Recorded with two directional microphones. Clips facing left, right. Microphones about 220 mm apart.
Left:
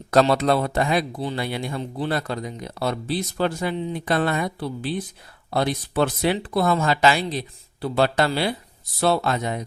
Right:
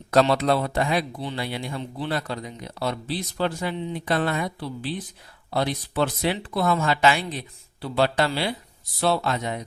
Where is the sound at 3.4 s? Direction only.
45° left (ahead or behind).